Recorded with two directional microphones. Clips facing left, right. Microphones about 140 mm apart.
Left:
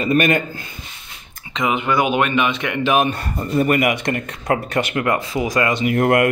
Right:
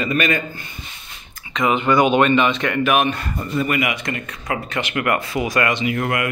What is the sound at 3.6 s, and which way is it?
Speech, 45° left (ahead or behind).